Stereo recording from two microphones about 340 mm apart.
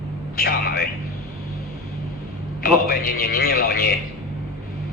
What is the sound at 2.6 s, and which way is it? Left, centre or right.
A man's voice, left.